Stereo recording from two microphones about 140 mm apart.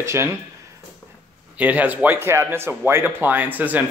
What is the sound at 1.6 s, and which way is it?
Speech, 10° right (ahead or behind).